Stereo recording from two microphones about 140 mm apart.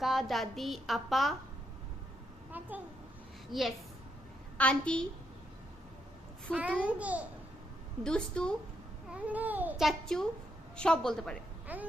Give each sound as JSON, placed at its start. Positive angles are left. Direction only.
{"t": 0.0, "sound": "a woman's voice", "side_deg": 0}
{"t": 2.5, "sound": "a child's voice", "side_deg": -10}
{"t": 3.5, "sound": "a woman's voice", "side_deg": 0}
{"t": 6.5, "sound": "a child's voice", "side_deg": -10}
{"t": 8.0, "sound": "a woman's voice", "side_deg": 5}
{"t": 9.0, "sound": "a child's voice", "side_deg": -10}
{"t": 9.8, "sound": "a woman's voice", "side_deg": 5}
{"t": 11.7, "sound": "a child's voice", "side_deg": -10}